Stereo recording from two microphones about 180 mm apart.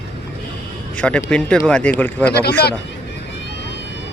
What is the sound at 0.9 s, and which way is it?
Speech, 5° left (ahead or behind).